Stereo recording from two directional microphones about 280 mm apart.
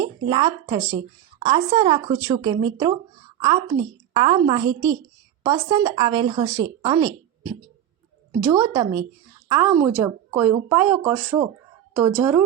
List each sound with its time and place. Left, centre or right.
0.0 s speech: centre
8.4 s speech: centre